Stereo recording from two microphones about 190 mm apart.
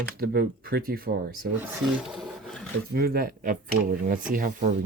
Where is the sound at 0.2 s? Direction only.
50° right (ahead or behind).